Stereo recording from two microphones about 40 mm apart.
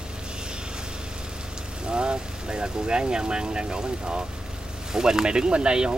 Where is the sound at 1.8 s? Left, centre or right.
Right.